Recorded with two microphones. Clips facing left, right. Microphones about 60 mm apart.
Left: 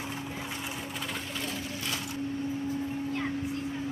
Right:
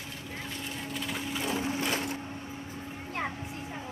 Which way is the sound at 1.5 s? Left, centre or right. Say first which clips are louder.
Right 5 dB; right.